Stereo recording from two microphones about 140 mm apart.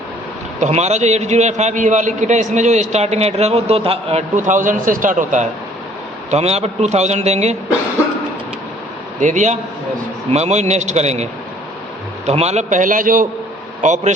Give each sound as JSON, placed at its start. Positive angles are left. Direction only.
{"t": 0.6, "sound": "a man's voice", "side_deg": -50}
{"t": 4.4, "sound": "a man's voice", "side_deg": -65}
{"t": 6.3, "sound": "speech", "side_deg": -50}
{"t": 9.2, "sound": "a man's voice", "side_deg": -60}
{"t": 13.8, "sound": "a man's voice", "side_deg": -60}